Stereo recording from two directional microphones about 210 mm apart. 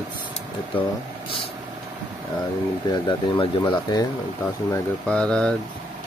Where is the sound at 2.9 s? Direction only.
20° left (ahead or behind).